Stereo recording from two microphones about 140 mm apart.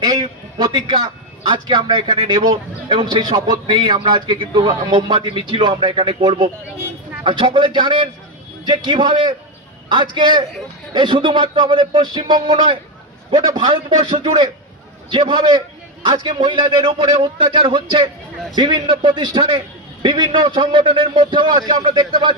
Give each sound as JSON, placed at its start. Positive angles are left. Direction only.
{"t": 0.0, "sound": "a man's voice", "side_deg": -30}